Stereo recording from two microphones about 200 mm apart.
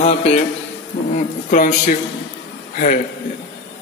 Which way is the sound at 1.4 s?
40° left (ahead or behind).